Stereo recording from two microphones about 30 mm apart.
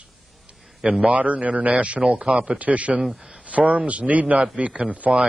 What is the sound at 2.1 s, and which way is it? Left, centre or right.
Speech, right.